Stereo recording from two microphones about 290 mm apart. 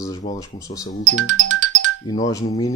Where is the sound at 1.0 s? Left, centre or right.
Right.